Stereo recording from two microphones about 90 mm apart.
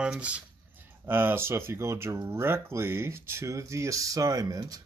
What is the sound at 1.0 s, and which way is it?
Speech, 25° right (ahead or behind).